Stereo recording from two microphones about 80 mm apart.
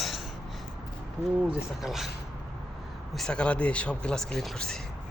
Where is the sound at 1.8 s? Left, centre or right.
Centre.